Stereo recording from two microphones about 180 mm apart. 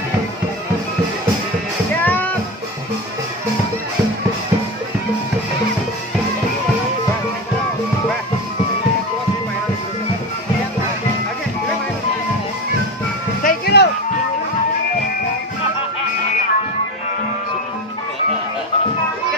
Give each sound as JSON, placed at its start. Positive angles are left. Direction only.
{"t": 2.0, "sound": "music", "side_deg": 10}
{"t": 13.4, "sound": "music", "side_deg": 55}